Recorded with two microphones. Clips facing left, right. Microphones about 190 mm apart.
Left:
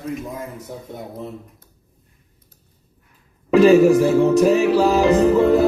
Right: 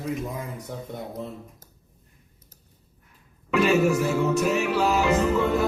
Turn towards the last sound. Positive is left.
turn(degrees=35)  # may be behind; listen again after turning